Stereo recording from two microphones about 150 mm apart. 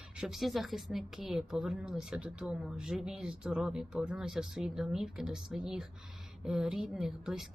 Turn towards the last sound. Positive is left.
turn(degrees=0)  # may be behind; listen again after turning